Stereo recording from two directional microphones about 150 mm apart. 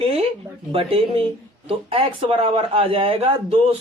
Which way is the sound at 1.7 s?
35° right (ahead or behind).